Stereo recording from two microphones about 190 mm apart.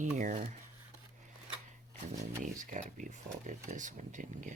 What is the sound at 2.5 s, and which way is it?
Speech, 40° right (ahead or behind).